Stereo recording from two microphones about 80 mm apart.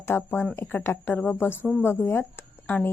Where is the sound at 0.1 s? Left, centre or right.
Left.